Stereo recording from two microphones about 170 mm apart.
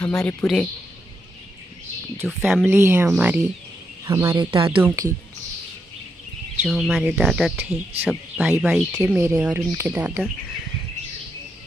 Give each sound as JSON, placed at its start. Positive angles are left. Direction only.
{"t": 0.0, "sound": "speech", "side_deg": 5}
{"t": 2.2, "sound": "speech", "side_deg": -5}
{"t": 4.5, "sound": "speech", "side_deg": -30}
{"t": 4.8, "sound": "speech", "side_deg": -20}
{"t": 6.6, "sound": "speech", "side_deg": 0}